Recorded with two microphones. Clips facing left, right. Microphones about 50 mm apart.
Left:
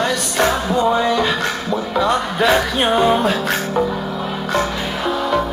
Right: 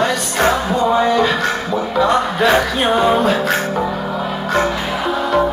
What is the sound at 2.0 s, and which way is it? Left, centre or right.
A man's voice, centre.